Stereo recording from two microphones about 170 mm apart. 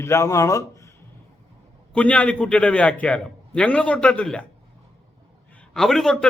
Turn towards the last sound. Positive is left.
turn(degrees=0)  # may be behind; listen again after turning